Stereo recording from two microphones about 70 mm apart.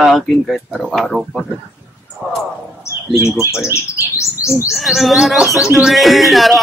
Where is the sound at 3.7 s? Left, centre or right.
Left.